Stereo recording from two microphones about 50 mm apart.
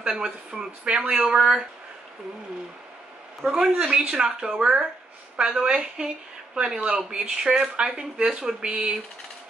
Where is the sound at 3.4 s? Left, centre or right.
Centre.